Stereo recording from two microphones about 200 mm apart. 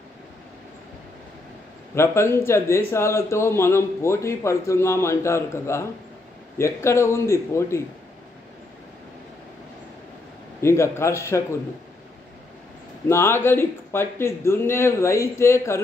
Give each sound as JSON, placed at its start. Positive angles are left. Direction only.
{"t": 2.0, "sound": "a man's voice", "side_deg": 10}
{"t": 10.6, "sound": "a man's voice", "side_deg": 15}
{"t": 13.1, "sound": "a man's voice", "side_deg": 10}